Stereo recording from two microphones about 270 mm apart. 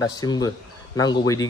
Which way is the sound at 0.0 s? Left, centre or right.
Centre.